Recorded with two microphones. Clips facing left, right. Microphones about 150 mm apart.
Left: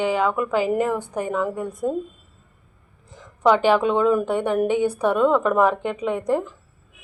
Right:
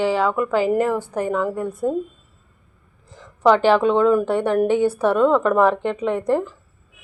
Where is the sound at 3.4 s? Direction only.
15° left (ahead or behind).